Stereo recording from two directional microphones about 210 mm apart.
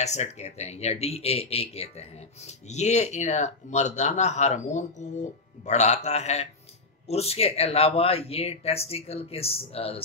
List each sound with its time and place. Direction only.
0.0 s speech: 30° left (ahead or behind)